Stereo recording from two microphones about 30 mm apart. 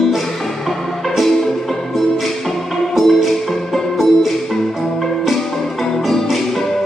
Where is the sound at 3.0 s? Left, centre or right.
Centre.